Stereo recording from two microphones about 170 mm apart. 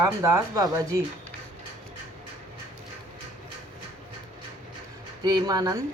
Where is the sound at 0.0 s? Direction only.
15° right (ahead or behind).